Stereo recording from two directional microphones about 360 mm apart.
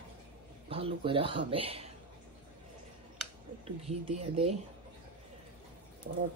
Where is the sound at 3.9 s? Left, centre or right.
Centre.